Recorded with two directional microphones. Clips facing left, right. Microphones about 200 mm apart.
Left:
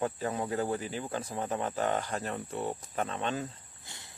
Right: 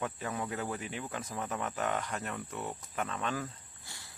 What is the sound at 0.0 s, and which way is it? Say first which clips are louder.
Speech: left 4 dB; 30° left (ahead or behind).